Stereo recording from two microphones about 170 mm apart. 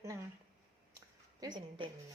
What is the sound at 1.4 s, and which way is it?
Speech, 25° right (ahead or behind).